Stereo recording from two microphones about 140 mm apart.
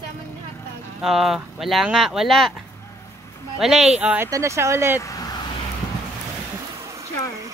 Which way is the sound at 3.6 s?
5° right (ahead or behind).